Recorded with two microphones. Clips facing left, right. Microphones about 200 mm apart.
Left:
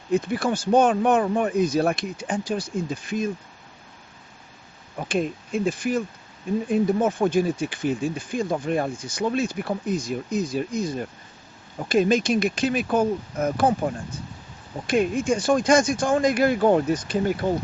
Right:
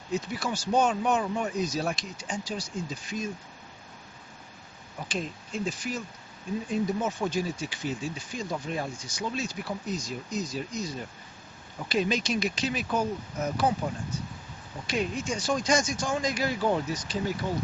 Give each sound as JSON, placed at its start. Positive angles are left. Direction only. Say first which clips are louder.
{"t": 0.1, "sound": "speech", "louder": "left 8 dB", "side_deg": 55}
{"t": 4.9, "sound": "speech", "louder": "left 9 dB", "side_deg": 55}